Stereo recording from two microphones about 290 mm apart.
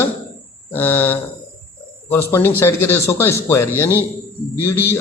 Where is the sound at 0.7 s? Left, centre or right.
Centre.